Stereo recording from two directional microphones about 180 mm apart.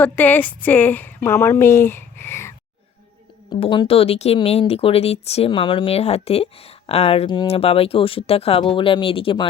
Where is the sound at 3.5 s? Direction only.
30° left (ahead or behind).